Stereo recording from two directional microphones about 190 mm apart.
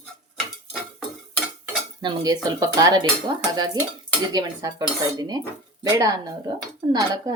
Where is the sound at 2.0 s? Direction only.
20° right (ahead or behind).